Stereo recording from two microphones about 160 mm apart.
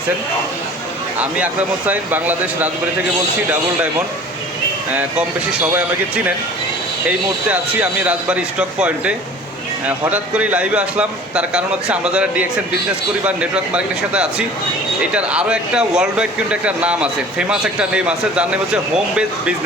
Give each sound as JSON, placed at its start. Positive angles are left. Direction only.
{"t": 1.9, "sound": "speech", "side_deg": -10}
{"t": 4.9, "sound": "speech", "side_deg": -5}
{"t": 7.5, "sound": "speech", "side_deg": -10}